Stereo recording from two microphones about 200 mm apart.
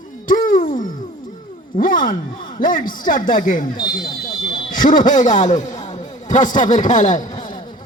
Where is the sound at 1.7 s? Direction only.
45° left (ahead or behind).